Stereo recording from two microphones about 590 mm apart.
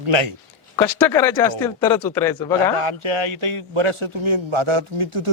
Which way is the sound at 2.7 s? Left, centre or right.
Right.